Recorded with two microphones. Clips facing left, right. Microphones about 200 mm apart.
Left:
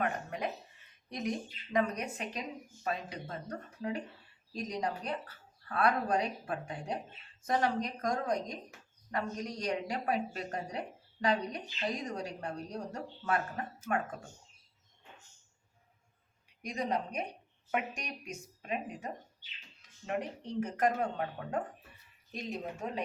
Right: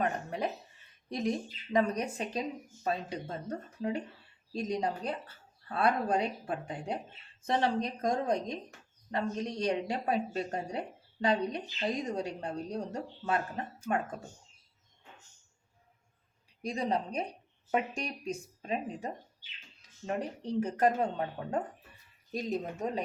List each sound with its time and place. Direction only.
0.0 s a sound: 30° right (ahead or behind)
1.1 s speech: 30° right (ahead or behind)
16.6 s speech: 30° right (ahead or behind)